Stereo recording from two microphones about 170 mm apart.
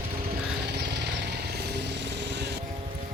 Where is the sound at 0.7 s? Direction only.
85° right.